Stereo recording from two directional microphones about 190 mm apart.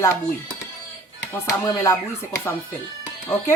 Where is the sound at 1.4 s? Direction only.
15° left (ahead or behind).